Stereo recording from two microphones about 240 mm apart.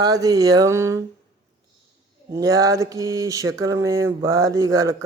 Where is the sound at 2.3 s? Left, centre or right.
Centre.